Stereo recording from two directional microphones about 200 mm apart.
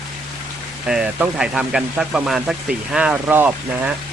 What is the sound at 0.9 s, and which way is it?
Speech, 5° right (ahead or behind).